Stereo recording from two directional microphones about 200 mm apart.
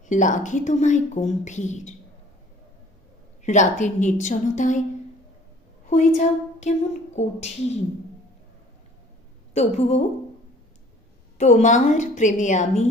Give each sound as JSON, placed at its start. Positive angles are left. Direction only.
{"t": 0.0, "sound": "speech", "side_deg": 40}
{"t": 3.4, "sound": "speech", "side_deg": 35}
{"t": 5.9, "sound": "a woman's voice", "side_deg": 35}
{"t": 9.6, "sound": "speech", "side_deg": 35}
{"t": 11.3, "sound": "speech", "side_deg": 35}